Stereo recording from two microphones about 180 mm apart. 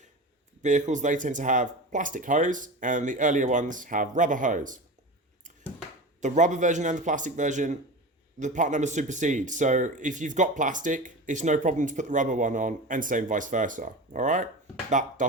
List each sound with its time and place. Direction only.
0.6 s speech: 45° right (ahead or behind)
6.2 s speech: 40° right (ahead or behind)